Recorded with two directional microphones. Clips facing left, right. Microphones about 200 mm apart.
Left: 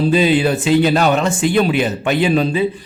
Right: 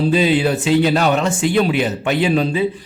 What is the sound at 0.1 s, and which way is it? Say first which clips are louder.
Speech: left 1 dB; 50° left (ahead or behind).